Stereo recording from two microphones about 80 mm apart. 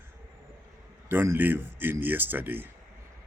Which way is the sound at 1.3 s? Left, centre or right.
Right.